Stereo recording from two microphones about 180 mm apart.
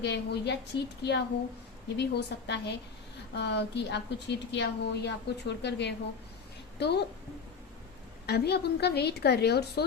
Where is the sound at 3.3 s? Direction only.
70° left (ahead or behind).